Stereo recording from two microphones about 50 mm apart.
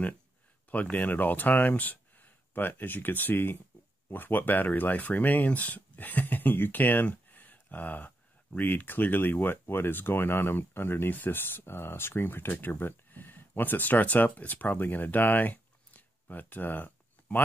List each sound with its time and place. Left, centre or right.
0.7 s speech: left
7.1 s a sound: left
8.5 s speech: left